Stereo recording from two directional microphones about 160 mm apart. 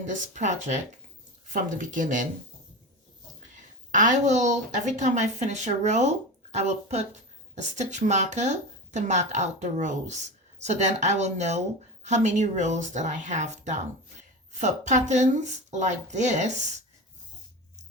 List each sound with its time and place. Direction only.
0.0 s speech: 50° right (ahead or behind)
3.9 s speech: 50° right (ahead or behind)